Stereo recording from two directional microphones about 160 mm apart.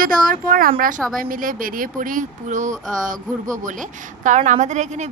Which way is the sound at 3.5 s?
55° right (ahead or behind).